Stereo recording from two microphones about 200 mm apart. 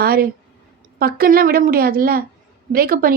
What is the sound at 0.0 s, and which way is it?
A woman's voice, 50° right (ahead or behind).